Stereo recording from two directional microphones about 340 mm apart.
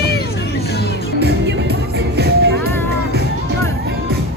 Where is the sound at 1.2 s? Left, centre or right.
Right.